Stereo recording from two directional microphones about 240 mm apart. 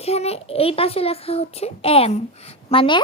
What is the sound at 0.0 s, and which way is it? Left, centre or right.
A child's voice, left.